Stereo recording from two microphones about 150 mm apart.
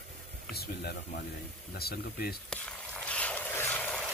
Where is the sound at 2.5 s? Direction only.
5° left (ahead or behind).